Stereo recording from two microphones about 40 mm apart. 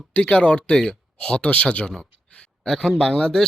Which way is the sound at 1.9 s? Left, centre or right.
Centre.